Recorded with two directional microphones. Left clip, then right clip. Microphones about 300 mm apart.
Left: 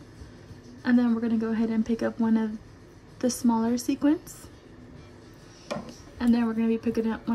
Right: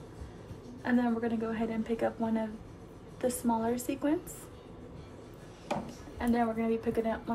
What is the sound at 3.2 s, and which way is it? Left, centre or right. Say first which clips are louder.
Speech: left 5 dB; left.